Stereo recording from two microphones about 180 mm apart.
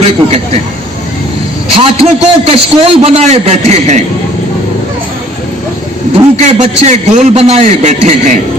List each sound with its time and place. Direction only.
1.7 s a man's voice: 30° right (ahead or behind)
6.4 s a man's voice: 40° right (ahead or behind)